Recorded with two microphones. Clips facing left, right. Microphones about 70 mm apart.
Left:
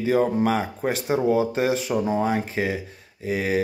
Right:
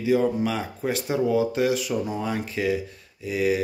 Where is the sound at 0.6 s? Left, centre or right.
Left.